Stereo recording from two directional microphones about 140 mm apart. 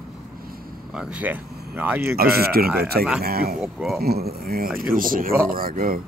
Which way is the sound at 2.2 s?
90° right.